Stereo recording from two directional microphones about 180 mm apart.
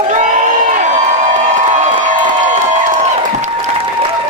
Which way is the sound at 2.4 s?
45° right (ahead or behind).